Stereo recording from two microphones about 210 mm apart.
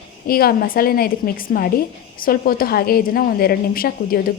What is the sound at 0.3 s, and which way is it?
A woman's voice, 45° left (ahead or behind).